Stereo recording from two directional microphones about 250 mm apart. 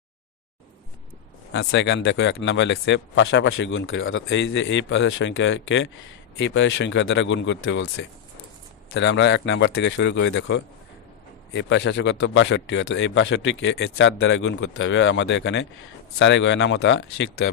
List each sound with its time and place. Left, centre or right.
1.5 s speech: left